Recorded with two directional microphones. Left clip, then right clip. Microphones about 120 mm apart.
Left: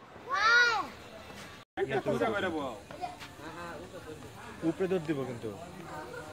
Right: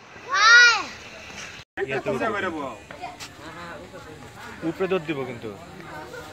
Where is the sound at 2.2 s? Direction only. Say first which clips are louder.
Right 5 dB; 5° right (ahead or behind).